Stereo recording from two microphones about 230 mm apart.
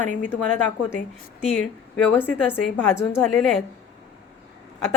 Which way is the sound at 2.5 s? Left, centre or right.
Centre.